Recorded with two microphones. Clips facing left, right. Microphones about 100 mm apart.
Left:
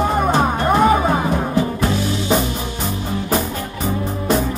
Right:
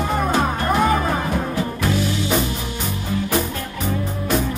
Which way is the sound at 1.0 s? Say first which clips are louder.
Left 4 dB; 20° left (ahead or behind).